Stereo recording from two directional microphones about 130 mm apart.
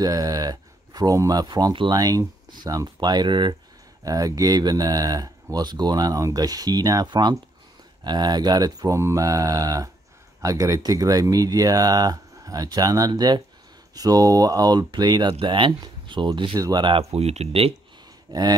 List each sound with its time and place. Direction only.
0.0 s speech: 30° right (ahead or behind)
17.1 s speech: 55° right (ahead or behind)
18.3 s speech: 35° right (ahead or behind)